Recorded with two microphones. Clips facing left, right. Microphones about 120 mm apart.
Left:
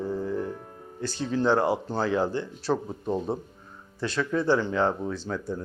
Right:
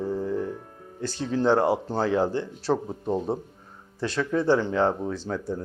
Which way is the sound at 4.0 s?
45° right (ahead or behind).